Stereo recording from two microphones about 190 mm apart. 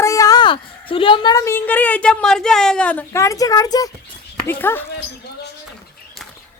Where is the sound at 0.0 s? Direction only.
15° left (ahead or behind).